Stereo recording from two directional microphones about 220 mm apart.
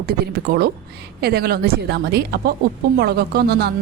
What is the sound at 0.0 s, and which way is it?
A woman's voice, 45° right (ahead or behind).